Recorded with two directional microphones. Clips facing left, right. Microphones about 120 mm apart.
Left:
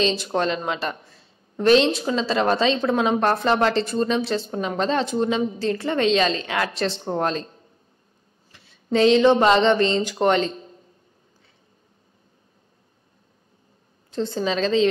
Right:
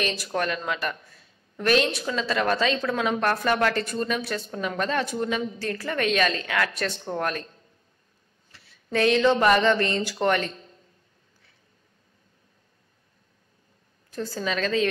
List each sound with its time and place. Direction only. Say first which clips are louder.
0.0 s a woman's voice: left 5 dB; 25° left (ahead or behind)
14.1 s a woman's voice: left 5 dB; 25° left (ahead or behind)